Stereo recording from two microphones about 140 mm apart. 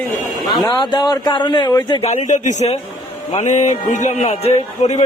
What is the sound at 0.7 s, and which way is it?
Speech, 30° left (ahead or behind).